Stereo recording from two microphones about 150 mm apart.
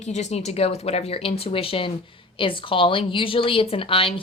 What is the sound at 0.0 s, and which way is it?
Speech, 50° left (ahead or behind).